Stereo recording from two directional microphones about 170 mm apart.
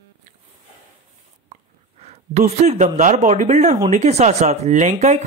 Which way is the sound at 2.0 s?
40° right (ahead or behind).